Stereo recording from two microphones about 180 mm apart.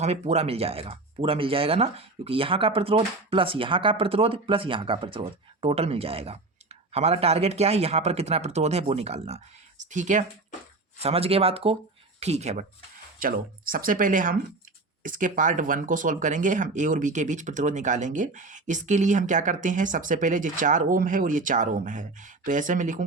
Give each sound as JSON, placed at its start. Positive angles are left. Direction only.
{"t": 0.0, "sound": "speech", "side_deg": -35}
{"t": 11.0, "sound": "speech", "side_deg": -35}
{"t": 13.1, "sound": "speech", "side_deg": -50}